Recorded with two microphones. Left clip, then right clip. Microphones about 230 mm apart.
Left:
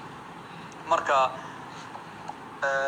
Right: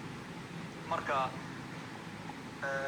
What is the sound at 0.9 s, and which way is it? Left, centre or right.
Speech, left.